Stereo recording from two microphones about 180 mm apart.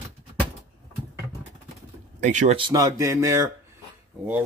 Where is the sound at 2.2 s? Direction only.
45° right (ahead or behind).